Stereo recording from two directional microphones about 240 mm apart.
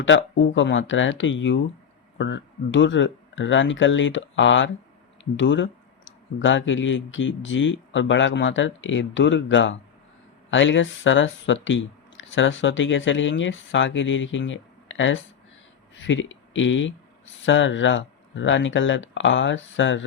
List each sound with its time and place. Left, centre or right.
0.0 s speech: left